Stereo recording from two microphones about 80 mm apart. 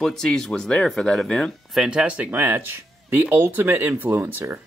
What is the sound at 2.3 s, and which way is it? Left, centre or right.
Speech, right.